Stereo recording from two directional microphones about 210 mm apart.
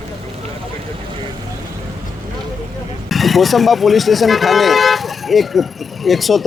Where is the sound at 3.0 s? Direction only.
Centre (ahead or behind).